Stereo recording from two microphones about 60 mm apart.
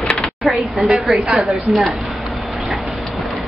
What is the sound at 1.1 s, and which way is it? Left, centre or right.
Speech, centre.